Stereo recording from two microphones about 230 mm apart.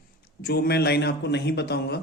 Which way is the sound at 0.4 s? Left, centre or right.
Left.